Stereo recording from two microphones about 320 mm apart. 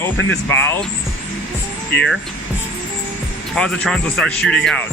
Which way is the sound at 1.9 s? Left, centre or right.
Left.